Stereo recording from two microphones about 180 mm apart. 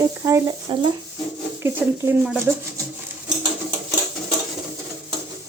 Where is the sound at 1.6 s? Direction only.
10° right (ahead or behind).